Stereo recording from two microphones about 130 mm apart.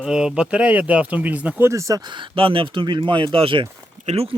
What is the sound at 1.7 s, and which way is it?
Speech, 25° right (ahead or behind).